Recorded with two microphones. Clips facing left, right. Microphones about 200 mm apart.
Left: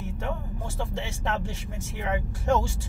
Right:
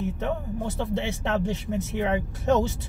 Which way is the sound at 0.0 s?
20° right (ahead or behind).